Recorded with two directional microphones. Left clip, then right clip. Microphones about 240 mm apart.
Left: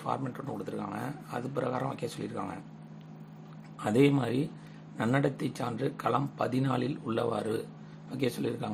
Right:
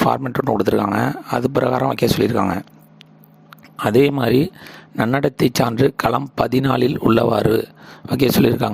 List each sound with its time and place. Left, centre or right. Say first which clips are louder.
0.1 s speech: right 16 dB; right
3.8 s speech: right 11 dB; right